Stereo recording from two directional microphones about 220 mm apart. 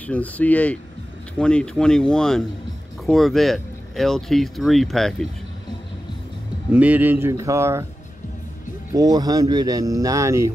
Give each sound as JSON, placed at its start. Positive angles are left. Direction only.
{"t": 0.0, "sound": "speech", "side_deg": 5}
{"t": 6.7, "sound": "speech", "side_deg": -5}
{"t": 8.9, "sound": "speech", "side_deg": -15}